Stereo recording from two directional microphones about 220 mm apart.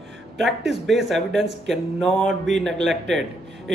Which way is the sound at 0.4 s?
Centre (ahead or behind).